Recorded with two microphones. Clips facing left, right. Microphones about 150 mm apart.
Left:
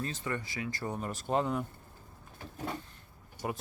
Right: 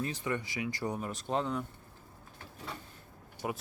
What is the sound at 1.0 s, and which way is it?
Speech, 5° left (ahead or behind).